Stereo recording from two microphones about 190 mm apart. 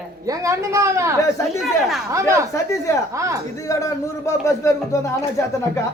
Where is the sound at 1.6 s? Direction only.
Centre (ahead or behind).